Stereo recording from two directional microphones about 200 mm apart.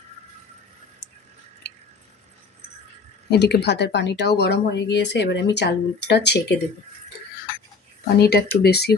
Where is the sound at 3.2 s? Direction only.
55° left (ahead or behind).